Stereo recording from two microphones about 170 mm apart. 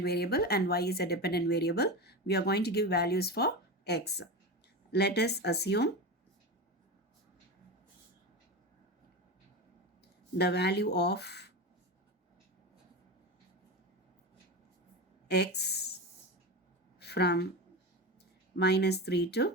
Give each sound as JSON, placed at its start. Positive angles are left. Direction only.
{"t": 0.0, "sound": "speech", "side_deg": 70}
{"t": 10.3, "sound": "speech", "side_deg": 75}
{"t": 15.3, "sound": "speech", "side_deg": 75}
{"t": 17.0, "sound": "a sound", "side_deg": 75}
{"t": 18.5, "sound": "speech", "side_deg": 75}